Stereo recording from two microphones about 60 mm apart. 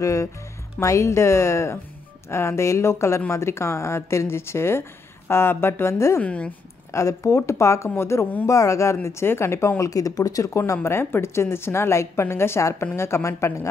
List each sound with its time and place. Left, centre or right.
0.0 s a woman's voice: left
6.2 s a woman's voice: centre
6.9 s a woman's voice: left
8.5 s speech: left
9.0 s a woman's voice: left
9.8 s speech: left
10.8 s a woman's voice: left